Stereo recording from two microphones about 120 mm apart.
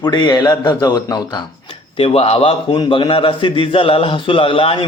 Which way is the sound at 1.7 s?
50° left (ahead or behind).